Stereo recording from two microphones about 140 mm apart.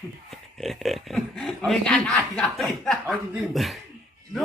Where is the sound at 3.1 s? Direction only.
10° right (ahead or behind).